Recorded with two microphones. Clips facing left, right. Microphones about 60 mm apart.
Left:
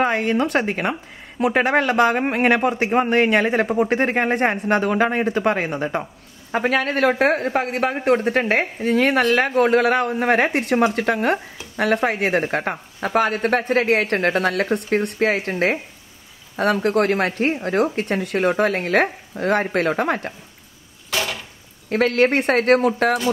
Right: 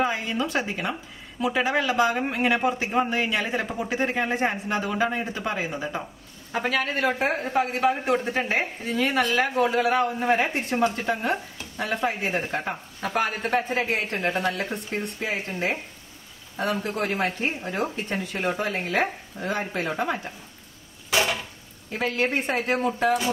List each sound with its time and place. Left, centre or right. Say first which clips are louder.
0.0 s a man's voice: left 6 dB; left
16.8 s speech: left 8 dB; left
21.1 s dishes: right 1 dB; centre
21.8 s speech: left 9 dB; left